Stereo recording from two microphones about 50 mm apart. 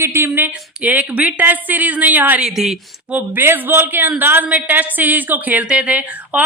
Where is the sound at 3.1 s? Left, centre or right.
Right.